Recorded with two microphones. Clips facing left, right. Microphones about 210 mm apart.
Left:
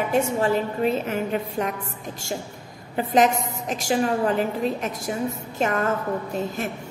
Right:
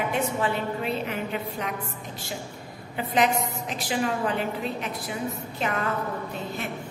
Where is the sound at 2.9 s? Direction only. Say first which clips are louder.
Left 4 dB; 45° left (ahead or behind).